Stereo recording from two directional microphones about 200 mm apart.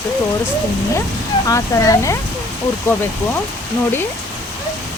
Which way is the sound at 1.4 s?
15° left (ahead or behind).